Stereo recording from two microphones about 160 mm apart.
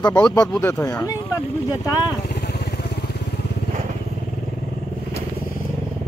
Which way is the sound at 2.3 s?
90° left.